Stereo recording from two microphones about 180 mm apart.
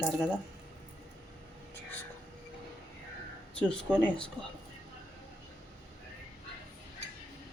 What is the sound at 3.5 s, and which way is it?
Speech, 5° left (ahead or behind).